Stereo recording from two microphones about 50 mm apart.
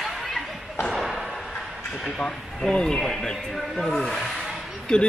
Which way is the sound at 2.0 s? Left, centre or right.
Centre.